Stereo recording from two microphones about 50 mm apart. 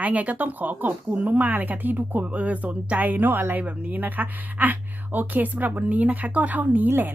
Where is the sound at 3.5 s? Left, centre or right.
Right.